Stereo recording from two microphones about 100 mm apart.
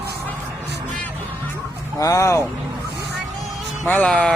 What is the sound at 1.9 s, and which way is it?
Speech, 35° left (ahead or behind).